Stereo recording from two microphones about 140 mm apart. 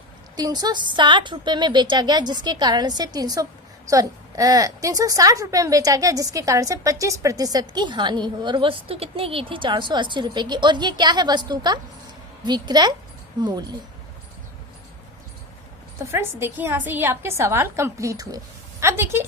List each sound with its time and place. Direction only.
0.3 s a woman's voice: 30° right (ahead or behind)
16.1 s a woman's voice: 15° right (ahead or behind)